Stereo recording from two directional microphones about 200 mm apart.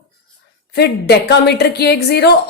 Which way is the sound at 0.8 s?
55° left (ahead or behind).